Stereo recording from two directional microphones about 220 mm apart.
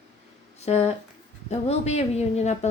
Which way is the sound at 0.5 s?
30° left (ahead or behind).